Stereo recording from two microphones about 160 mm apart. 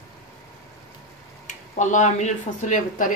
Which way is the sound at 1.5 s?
50° left (ahead or behind).